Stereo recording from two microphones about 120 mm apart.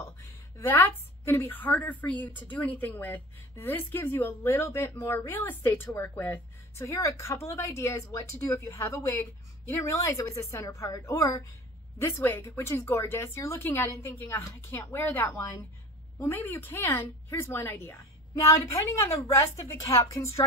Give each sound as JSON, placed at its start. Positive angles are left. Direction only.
{"t": 0.0, "sound": "a woman's voice", "side_deg": 20}
{"t": 19.1, "sound": "a woman's voice", "side_deg": 25}